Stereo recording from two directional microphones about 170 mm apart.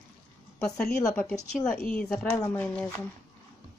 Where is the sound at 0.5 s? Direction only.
5° left (ahead or behind).